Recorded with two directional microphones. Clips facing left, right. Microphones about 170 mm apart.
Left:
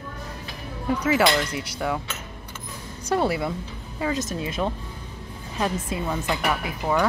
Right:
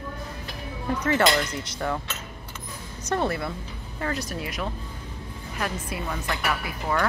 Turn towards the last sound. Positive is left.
turn(degrees=15)  # may be behind; listen again after turning